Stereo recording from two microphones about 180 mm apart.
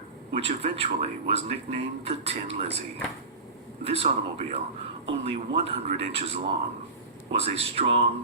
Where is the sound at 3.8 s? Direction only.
35° right (ahead or behind).